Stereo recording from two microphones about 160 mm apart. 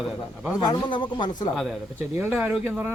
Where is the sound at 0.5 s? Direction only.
30° left (ahead or behind).